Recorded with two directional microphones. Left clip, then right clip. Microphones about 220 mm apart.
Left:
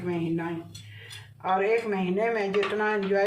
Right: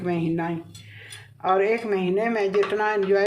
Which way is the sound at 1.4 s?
50° right (ahead or behind).